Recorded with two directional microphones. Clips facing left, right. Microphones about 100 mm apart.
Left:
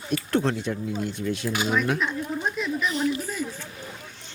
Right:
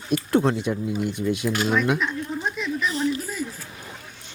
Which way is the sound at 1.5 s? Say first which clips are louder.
Right 1 dB; 5° left (ahead or behind).